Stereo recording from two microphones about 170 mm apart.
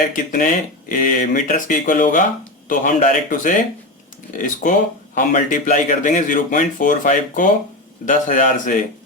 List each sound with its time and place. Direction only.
0.1 s speech: 50° left (ahead or behind)